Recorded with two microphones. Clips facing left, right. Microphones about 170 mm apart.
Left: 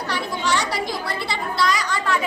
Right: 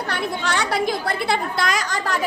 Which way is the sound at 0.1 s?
55° right (ahead or behind).